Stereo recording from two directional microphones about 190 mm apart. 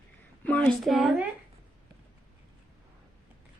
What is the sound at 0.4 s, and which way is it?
Speech, 10° left (ahead or behind).